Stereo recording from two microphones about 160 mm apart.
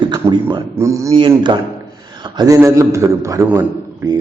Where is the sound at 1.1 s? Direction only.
30° right (ahead or behind).